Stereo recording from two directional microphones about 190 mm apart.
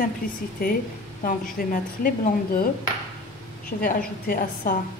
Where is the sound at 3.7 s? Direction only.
50° left (ahead or behind).